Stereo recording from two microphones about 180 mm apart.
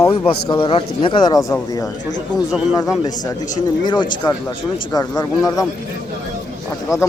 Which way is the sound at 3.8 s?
25° left (ahead or behind).